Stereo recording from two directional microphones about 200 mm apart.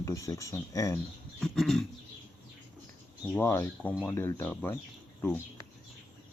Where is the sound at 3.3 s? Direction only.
10° left (ahead or behind).